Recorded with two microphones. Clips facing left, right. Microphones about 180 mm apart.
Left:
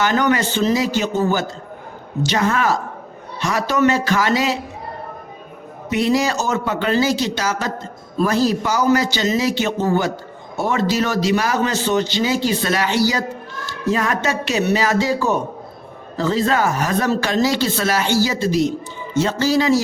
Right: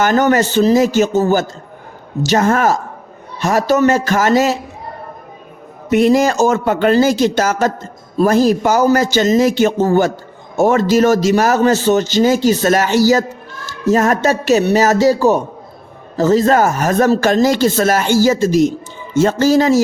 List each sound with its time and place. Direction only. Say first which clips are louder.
0.0 s a man's voice: right 5 dB; 45° right (ahead or behind)
5.9 s a man's voice: right 6 dB; 50° right (ahead or behind)